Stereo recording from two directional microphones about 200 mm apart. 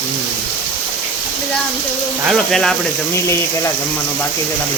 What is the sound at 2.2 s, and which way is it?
Speech, centre (ahead or behind).